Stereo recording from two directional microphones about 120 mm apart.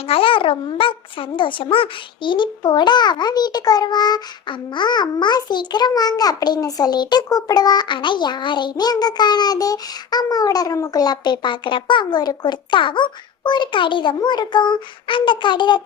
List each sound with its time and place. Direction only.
0.1 s a child's voice: 50° left (ahead or behind)